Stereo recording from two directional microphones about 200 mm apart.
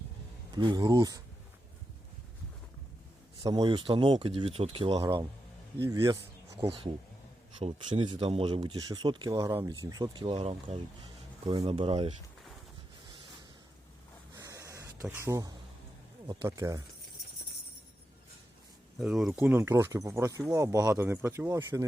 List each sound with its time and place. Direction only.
0.5 s speech: 20° right (ahead or behind)
3.4 s speech: 20° right (ahead or behind)
5.7 s speech: 15° right (ahead or behind)
6.7 s speech: 30° right (ahead or behind)
14.3 s snort: 15° right (ahead or behind)
15.0 s speech: 10° right (ahead or behind)
18.9 s speech: centre (ahead or behind)